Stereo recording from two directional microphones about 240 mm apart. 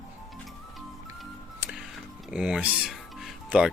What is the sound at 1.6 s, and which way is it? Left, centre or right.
Music, centre.